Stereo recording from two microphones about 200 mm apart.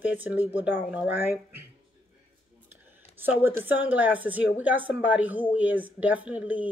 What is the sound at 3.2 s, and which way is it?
A woman's voice, 10° right (ahead or behind).